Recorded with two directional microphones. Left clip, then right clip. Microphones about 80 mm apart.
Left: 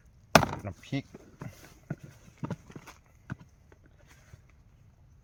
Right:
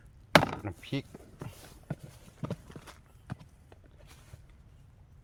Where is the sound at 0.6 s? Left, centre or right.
Right.